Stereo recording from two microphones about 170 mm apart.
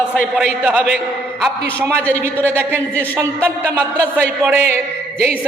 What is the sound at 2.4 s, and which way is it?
Speech, 10° right (ahead or behind).